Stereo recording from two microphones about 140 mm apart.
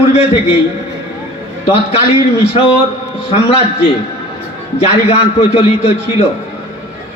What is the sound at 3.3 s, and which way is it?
A man's voice, 45° left (ahead or behind).